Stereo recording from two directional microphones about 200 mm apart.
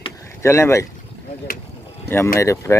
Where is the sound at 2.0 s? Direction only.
10° left (ahead or behind).